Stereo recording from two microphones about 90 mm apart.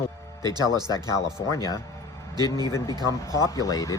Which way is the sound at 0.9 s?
35° left (ahead or behind).